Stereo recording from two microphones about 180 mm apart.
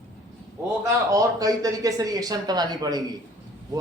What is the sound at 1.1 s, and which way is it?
Speech, 20° right (ahead or behind).